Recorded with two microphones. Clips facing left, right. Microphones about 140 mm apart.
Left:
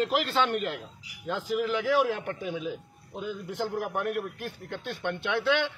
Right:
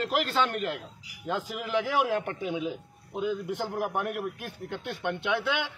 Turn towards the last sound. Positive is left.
turn(degrees=-15)  # may be behind; listen again after turning